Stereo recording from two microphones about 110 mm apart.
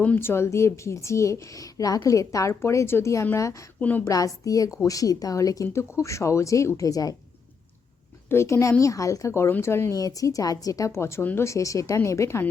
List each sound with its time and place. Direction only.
0.0 s a woman's voice: 15° left (ahead or behind)
3.8 s a woman's voice: 15° left (ahead or behind)
4.0 s a woman's voice: 30° left (ahead or behind)
8.3 s a woman's voice: 25° left (ahead or behind)